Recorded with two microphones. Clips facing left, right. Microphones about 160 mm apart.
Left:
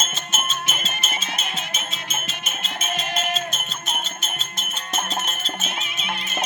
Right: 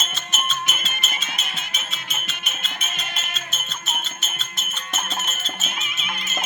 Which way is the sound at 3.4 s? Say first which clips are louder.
Left 6 dB; 55° left (ahead or behind).